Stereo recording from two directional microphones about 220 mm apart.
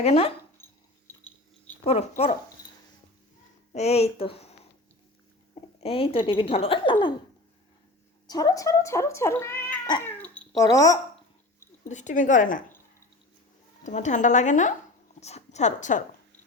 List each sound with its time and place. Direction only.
0.0 s speech: 30° left (ahead or behind)
1.8 s speech: 30° left (ahead or behind)
3.7 s speech: 30° left (ahead or behind)
5.8 s speech: 25° left (ahead or behind)
8.3 s speech: 15° left (ahead or behind)
10.1 s cat: 5° left (ahead or behind)
11.9 s a woman's voice: 35° left (ahead or behind)
13.8 s a woman's voice: 35° left (ahead or behind)